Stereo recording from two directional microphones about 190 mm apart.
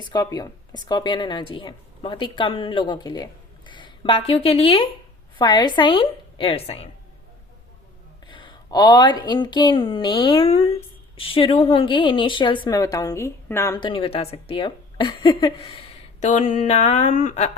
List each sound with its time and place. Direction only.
0.1 s speech: 20° left (ahead or behind)
8.3 s speech: 25° left (ahead or behind)
16.2 s speech: 40° left (ahead or behind)